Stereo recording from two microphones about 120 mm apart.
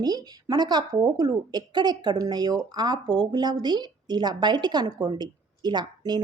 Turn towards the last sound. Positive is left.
turn(degrees=-35)  # may be behind; listen again after turning